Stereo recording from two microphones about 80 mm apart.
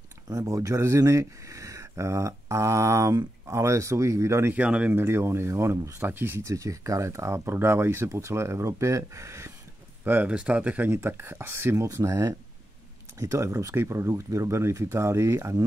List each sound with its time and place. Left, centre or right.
0.3 s speech: right
4.6 s speech: centre
4.9 s speech: right
6.4 s speech: right
10.0 s speech: right
10.3 s speech: centre; by 15.6 s right